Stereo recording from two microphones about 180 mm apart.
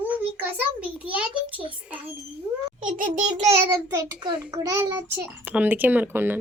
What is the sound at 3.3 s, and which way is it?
A child's voice, 15° right (ahead or behind).